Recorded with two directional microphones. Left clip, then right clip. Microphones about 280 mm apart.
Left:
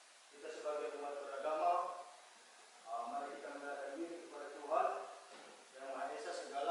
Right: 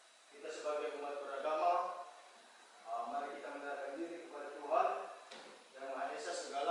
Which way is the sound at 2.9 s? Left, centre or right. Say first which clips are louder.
Right 2 dB; centre.